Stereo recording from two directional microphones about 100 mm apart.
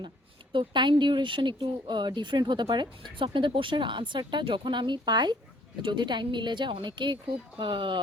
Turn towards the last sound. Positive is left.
turn(degrees=-55)  # may be behind; listen again after turning